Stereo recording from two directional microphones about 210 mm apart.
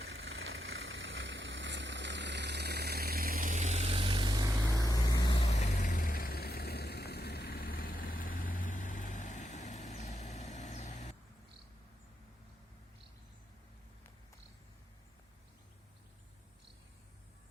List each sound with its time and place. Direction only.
0.0 s vehicle: 65° right (ahead or behind); by 4.7 s 20° right (ahead or behind)
4.7 s vehicle: 15° left (ahead or behind); by 11.1 s 35° left (ahead or behind)